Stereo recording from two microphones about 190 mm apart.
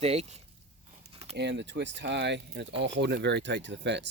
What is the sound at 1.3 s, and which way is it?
Speech, 65° right (ahead or behind).